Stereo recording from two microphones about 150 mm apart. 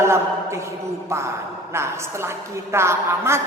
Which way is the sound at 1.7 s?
15° right (ahead or behind).